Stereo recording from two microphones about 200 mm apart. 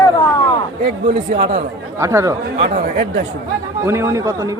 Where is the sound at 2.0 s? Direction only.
15° right (ahead or behind).